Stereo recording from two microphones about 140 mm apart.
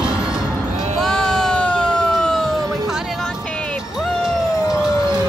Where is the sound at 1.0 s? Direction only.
5° left (ahead or behind).